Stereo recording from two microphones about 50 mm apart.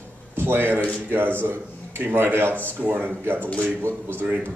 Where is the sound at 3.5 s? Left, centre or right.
Left.